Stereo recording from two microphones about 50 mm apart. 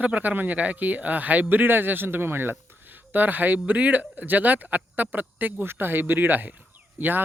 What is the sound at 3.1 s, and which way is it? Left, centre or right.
Speech, right.